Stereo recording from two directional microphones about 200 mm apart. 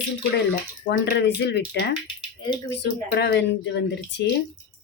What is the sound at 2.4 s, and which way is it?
Speech, 20° left (ahead or behind).